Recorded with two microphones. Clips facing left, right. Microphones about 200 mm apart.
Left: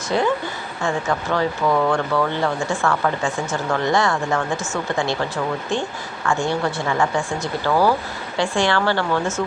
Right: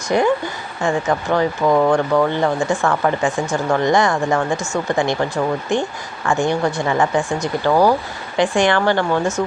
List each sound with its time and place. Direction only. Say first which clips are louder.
0.1 s speech: right 4 dB; 15° right (ahead or behind)